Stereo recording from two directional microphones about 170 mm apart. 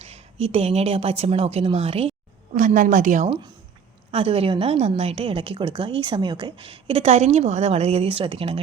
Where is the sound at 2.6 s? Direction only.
50° right (ahead or behind).